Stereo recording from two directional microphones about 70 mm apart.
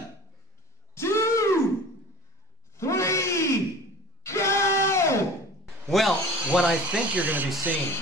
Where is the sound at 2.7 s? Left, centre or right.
Left.